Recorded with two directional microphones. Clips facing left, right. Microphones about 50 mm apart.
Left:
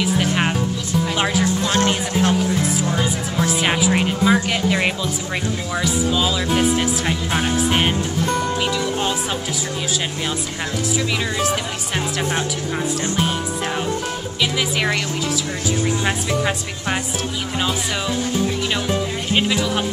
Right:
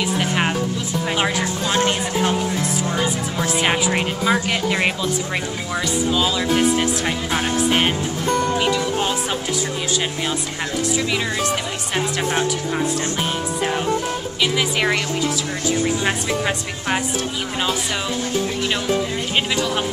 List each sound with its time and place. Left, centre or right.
0.2 s speech: centre
1.4 s speech: centre
1.9 s speech: centre
11.3 s speech: centre
14.4 s speech: centre
16.0 s speech: centre
19.3 s speech: centre